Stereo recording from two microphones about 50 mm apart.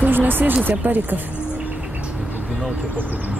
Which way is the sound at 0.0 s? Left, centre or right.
Right.